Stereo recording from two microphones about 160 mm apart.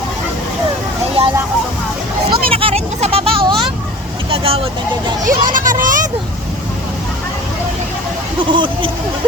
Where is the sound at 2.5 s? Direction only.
35° right (ahead or behind).